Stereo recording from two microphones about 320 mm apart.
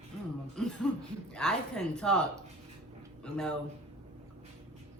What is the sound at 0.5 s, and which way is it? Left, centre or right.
A woman's voice, centre.